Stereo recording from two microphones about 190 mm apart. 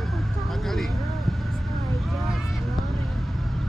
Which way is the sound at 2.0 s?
Centre (ahead or behind).